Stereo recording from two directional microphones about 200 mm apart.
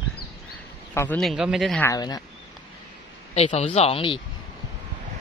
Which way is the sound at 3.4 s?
30° left (ahead or behind).